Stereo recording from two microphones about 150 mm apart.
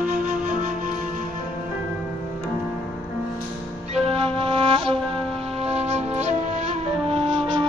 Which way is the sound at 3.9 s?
40° right (ahead or behind).